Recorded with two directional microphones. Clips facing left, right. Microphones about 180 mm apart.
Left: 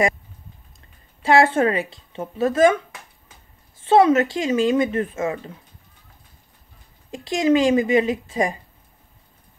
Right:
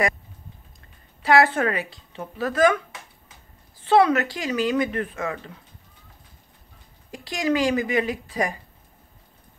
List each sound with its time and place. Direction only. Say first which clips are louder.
1.2 s speech: left 3 dB; 25° left (ahead or behind)
3.8 s speech: left 3 dB; 25° left (ahead or behind)
7.1 s speech: left 6 dB; 25° left (ahead or behind)